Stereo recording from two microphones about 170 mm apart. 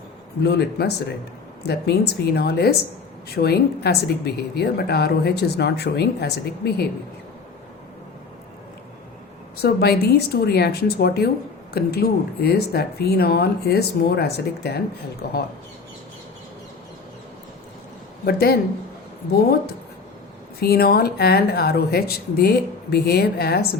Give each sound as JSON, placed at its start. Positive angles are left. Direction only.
{"t": 0.4, "sound": "a woman's voice", "side_deg": 75}
{"t": 9.6, "sound": "a woman's voice", "side_deg": 70}
{"t": 15.2, "sound": "speech", "side_deg": 65}
{"t": 18.3, "sound": "a woman's voice", "side_deg": 65}